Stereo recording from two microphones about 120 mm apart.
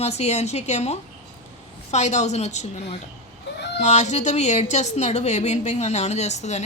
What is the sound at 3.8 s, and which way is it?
A woman's voice, 75° left (ahead or behind).